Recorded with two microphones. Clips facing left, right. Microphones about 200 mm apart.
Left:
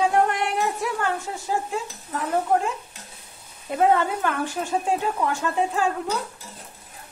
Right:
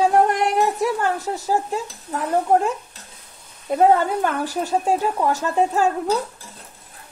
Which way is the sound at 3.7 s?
40° right (ahead or behind).